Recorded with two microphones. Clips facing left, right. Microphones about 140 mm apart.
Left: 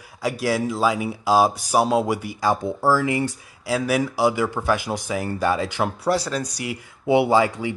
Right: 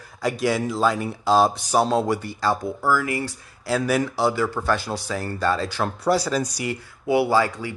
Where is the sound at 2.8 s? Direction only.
30° left (ahead or behind).